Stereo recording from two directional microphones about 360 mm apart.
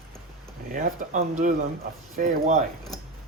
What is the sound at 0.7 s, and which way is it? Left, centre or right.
Speech, right.